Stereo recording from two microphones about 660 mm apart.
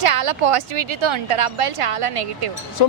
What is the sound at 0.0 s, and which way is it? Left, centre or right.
A woman's voice, right.